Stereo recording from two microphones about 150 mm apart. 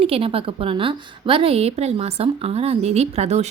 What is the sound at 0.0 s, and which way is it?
A woman's voice, 40° right (ahead or behind).